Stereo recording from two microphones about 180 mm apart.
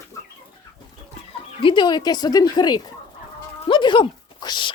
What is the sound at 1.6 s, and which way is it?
Speech, 25° left (ahead or behind).